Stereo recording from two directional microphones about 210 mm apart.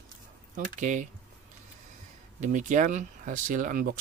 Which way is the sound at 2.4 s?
35° right (ahead or behind).